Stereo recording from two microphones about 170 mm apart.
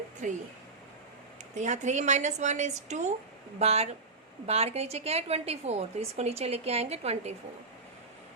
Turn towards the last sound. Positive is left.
turn(degrees=-40)  # may be behind; listen again after turning